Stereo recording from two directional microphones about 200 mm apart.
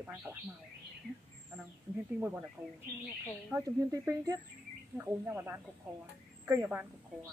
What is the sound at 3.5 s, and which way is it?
A woman's voice, 15° right (ahead or behind).